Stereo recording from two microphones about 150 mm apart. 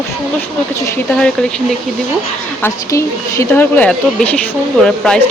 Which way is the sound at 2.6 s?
15° left (ahead or behind).